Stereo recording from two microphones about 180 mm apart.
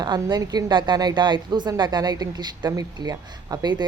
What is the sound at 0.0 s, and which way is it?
A woman's voice, 25° right (ahead or behind).